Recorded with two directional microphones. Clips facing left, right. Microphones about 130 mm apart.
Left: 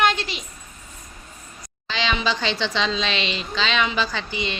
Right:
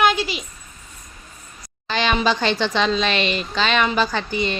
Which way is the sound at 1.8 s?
50° right (ahead or behind).